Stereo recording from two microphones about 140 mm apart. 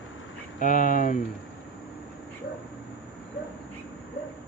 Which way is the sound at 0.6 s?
70° left (ahead or behind).